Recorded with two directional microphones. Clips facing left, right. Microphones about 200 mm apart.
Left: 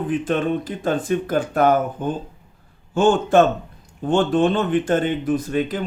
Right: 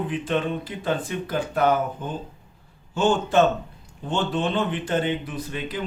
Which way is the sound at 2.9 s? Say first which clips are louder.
Left 5 dB; 50° left (ahead or behind).